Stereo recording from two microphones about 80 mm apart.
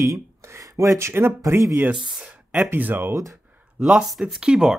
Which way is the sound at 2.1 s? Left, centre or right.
Centre.